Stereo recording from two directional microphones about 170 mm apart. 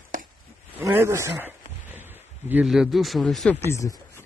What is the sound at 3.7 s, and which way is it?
Speech, 20° left (ahead or behind).